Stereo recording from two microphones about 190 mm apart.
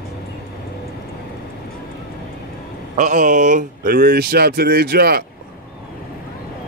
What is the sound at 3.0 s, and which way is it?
Speech, 40° right (ahead or behind).